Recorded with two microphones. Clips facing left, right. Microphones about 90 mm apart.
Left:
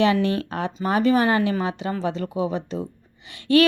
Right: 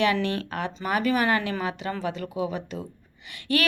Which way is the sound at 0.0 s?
25° left (ahead or behind).